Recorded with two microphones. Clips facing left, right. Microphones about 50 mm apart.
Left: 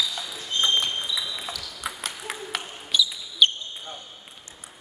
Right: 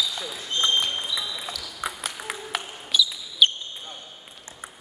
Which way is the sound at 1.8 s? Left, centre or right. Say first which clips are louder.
Right 3 dB; centre.